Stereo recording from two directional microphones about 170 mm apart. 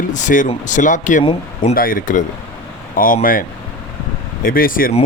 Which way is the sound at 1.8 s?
55° left (ahead or behind).